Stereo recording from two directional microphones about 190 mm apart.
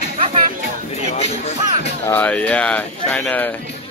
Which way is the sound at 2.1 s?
10° left (ahead or behind).